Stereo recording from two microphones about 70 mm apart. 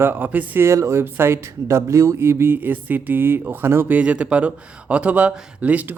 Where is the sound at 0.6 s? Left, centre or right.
Right.